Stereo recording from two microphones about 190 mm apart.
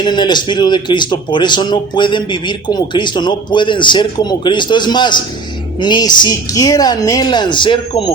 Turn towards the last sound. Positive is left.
turn(degrees=25)  # may be behind; listen again after turning